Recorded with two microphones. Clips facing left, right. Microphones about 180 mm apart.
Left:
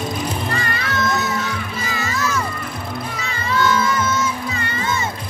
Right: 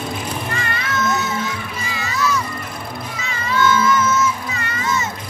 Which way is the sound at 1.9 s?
50° left (ahead or behind).